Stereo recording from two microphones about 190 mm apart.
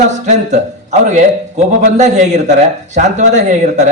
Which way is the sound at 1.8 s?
40° right (ahead or behind).